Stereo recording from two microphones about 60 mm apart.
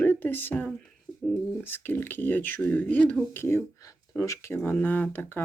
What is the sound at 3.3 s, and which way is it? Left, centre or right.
Speech, left.